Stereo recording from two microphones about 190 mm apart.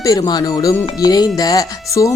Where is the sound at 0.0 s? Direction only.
20° left (ahead or behind).